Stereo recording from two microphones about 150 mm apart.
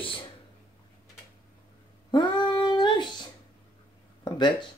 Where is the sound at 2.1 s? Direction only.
30° left (ahead or behind).